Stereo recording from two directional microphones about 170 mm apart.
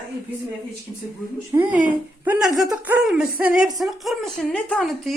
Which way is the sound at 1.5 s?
15° right (ahead or behind).